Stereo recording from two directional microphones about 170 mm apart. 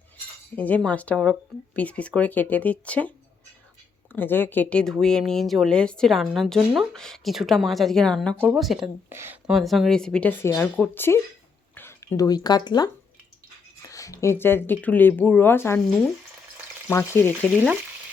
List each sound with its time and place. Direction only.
0.5 s speech: 10° left (ahead or behind)
4.1 s speech: 10° left (ahead or behind)
9.0 s speech: 15° right (ahead or behind)
9.5 s speech: centre (ahead or behind)
16.9 s speech: 15° left (ahead or behind)